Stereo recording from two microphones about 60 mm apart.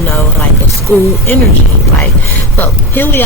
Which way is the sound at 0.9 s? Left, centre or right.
Left.